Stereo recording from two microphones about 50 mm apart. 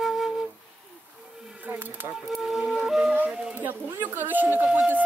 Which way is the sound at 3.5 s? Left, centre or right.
Right.